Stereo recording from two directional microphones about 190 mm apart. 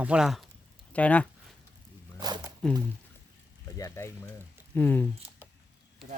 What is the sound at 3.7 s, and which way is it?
Speech, 15° left (ahead or behind).